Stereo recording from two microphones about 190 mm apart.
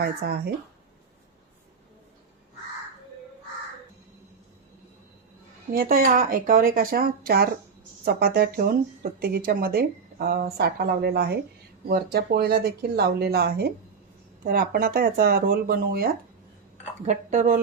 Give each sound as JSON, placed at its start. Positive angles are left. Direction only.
{"t": 0.0, "sound": "speech", "side_deg": -55}
{"t": 5.7, "sound": "speech", "side_deg": -50}
{"t": 17.1, "sound": "speech", "side_deg": -40}